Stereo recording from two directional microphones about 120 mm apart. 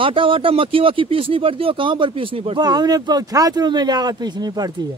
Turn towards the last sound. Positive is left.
turn(degrees=-35)  # may be behind; listen again after turning